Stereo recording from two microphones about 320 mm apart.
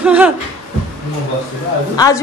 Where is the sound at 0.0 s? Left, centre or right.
Centre.